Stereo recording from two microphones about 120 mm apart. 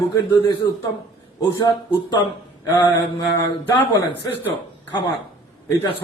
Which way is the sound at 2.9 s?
25° left (ahead or behind).